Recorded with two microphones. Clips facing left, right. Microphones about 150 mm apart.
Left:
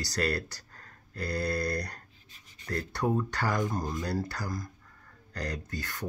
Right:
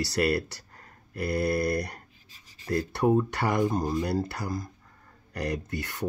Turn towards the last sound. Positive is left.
turn(degrees=-20)  # may be behind; listen again after turning